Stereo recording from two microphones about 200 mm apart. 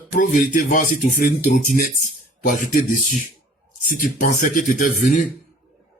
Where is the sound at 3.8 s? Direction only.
45° left (ahead or behind).